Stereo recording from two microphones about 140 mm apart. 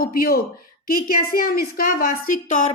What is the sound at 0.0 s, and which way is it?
A woman's voice, 90° left.